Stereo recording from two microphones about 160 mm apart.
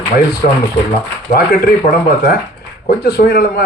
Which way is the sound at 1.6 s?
70° left (ahead or behind).